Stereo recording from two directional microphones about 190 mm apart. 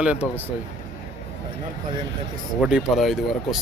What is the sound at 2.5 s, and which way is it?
A man's voice, 5° right (ahead or behind).